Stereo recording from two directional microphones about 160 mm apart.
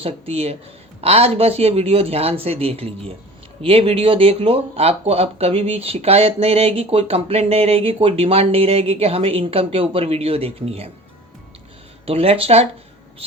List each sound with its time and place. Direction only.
0.0 s speech: 40° right (ahead or behind)
12.0 s speech: 35° right (ahead or behind)